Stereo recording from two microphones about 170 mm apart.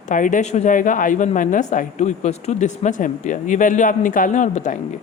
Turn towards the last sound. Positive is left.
turn(degrees=45)  # may be behind; listen again after turning